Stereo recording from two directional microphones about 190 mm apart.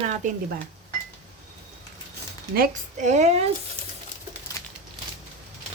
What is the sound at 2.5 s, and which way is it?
Speech, 45° right (ahead or behind).